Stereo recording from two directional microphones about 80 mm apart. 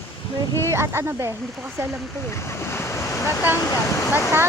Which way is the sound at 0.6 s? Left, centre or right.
Right.